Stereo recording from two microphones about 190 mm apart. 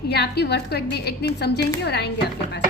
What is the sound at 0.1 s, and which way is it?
A woman's voice, 60° left (ahead or behind).